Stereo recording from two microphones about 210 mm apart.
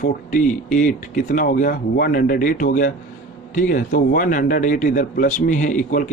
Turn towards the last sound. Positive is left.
turn(degrees=40)  # may be behind; listen again after turning